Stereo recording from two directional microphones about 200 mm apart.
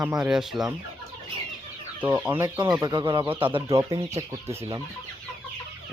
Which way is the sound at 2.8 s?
20° right (ahead or behind).